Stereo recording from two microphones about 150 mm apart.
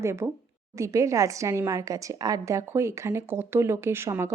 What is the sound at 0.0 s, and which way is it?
A woman's voice, 20° right (ahead or behind).